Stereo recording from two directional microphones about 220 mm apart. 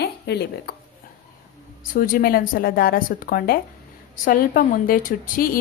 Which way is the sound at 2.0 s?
40° left (ahead or behind).